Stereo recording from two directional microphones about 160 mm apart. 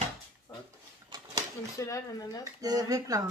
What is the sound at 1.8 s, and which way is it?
Speech, 20° left (ahead or behind).